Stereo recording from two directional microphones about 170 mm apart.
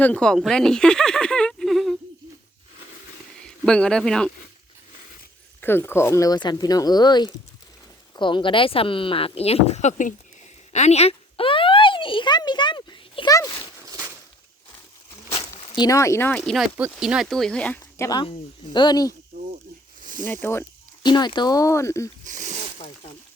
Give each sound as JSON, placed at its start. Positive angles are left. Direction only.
{"t": 0.0, "sound": "a sound", "side_deg": 5}
{"t": 3.4, "sound": "speech", "side_deg": 5}
{"t": 5.5, "sound": "speech", "side_deg": 10}
{"t": 10.7, "sound": "a sound", "side_deg": 40}
{"t": 15.3, "sound": "speech", "side_deg": 35}
{"t": 18.2, "sound": "speech", "side_deg": 30}
{"t": 20.0, "sound": "snake", "side_deg": -50}
{"t": 20.2, "sound": "speech", "side_deg": 10}
{"t": 21.0, "sound": "speech", "side_deg": 25}
{"t": 22.2, "sound": "a sound", "side_deg": -45}